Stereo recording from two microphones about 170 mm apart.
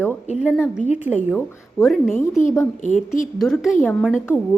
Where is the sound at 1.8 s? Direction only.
Centre (ahead or behind).